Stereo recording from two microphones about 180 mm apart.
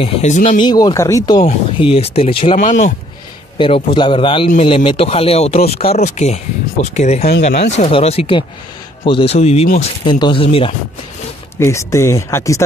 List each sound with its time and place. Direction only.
0.0 s speech: 40° left (ahead or behind)
0.6 s a man's voice: 25° left (ahead or behind)
1.4 s speech: 35° left (ahead or behind)
3.5 s a man's voice: 30° left (ahead or behind)
10.0 s a man's voice: 25° left (ahead or behind)
11.5 s speech: 15° left (ahead or behind)